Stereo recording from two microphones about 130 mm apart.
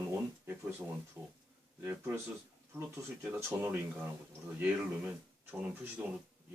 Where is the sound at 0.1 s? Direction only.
20° right (ahead or behind).